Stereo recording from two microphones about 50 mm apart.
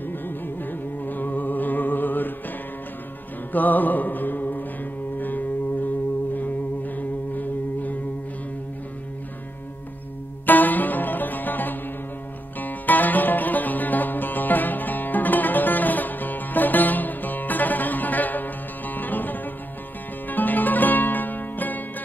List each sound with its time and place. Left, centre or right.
0.0 s music: left
3.5 s music: left
10.4 s music: left